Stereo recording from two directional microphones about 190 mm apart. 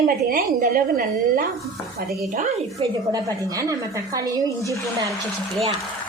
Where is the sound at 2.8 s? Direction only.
20° right (ahead or behind).